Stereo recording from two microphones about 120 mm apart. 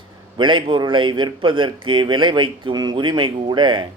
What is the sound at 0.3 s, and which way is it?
Speech, 40° right (ahead or behind).